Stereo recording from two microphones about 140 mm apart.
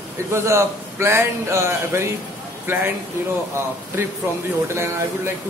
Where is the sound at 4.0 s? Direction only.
15° right (ahead or behind).